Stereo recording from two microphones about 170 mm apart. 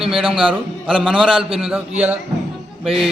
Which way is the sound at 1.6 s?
Centre (ahead or behind).